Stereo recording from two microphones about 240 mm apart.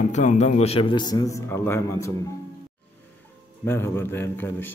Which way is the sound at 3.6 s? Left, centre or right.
Centre.